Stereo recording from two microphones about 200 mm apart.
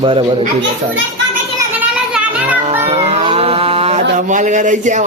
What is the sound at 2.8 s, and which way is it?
Cat, 30° right (ahead or behind).